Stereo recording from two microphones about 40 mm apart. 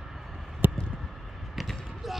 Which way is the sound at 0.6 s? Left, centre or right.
Right.